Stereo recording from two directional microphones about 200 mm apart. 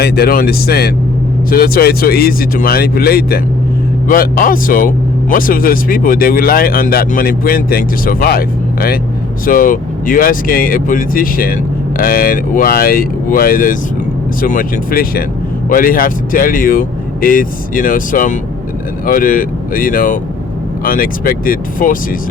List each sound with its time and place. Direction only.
0.0 s speech: 50° left (ahead or behind)